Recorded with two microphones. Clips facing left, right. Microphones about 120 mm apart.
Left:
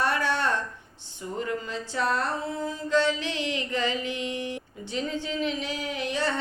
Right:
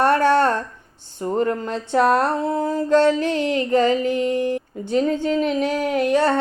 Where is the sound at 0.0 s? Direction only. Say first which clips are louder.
Right 10 dB; 50° right (ahead or behind).